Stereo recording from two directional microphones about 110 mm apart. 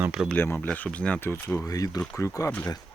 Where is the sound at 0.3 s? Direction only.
20° left (ahead or behind).